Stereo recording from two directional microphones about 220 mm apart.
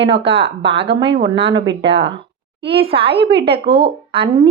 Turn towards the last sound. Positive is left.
turn(degrees=-25)  # may be behind; listen again after turning